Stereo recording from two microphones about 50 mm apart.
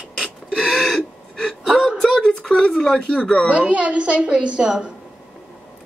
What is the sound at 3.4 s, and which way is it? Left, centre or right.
A woman's voice, right.